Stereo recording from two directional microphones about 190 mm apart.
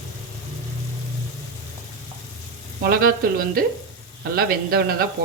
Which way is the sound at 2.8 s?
50° right (ahead or behind).